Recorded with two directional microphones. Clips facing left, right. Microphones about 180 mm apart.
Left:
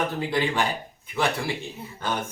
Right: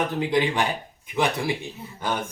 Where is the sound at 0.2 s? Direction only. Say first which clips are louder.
Right 2 dB; 15° right (ahead or behind).